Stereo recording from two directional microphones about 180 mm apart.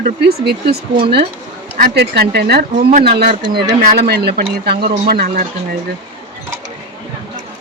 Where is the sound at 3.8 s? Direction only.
60° right (ahead or behind).